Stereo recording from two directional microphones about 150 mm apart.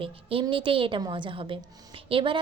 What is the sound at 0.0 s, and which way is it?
A woman's voice, 35° right (ahead or behind).